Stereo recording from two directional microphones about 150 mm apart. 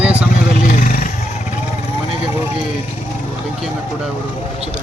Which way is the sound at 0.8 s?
65° left (ahead or behind).